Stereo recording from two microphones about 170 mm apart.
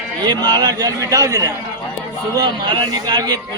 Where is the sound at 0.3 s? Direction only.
25° right (ahead or behind).